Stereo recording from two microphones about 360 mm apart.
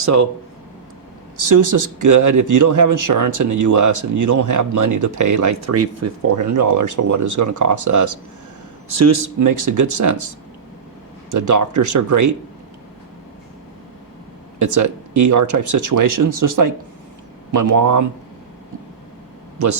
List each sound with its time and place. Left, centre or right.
0.0 s speech: right
1.4 s speech: right
14.6 s speech: right
19.5 s a man's voice: right